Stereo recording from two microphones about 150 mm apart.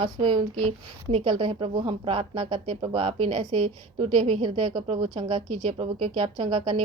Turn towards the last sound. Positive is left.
turn(degrees=-40)  # may be behind; listen again after turning